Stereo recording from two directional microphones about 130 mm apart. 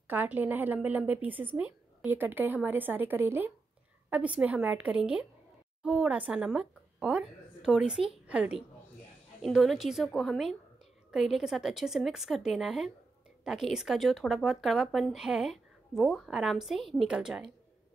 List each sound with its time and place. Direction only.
0.1 s a woman's voice: 15° right (ahead or behind)